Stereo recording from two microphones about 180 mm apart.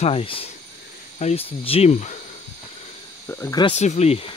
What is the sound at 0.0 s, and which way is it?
Speech, 30° left (ahead or behind).